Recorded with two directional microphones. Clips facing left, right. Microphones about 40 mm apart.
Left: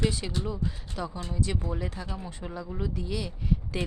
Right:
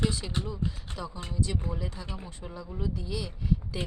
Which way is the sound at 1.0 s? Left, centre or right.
Left.